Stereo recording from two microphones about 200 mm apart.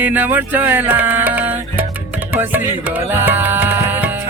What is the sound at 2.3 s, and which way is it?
Music, 10° right (ahead or behind).